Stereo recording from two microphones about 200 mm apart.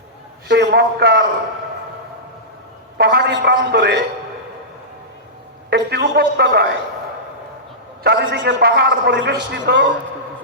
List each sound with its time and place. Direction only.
0.4 s a man's voice: 55° right (ahead or behind)
3.0 s a man's voice: 55° right (ahead or behind)
5.7 s a man's voice: 55° right (ahead or behind)
8.0 s a man's voice: 55° right (ahead or behind)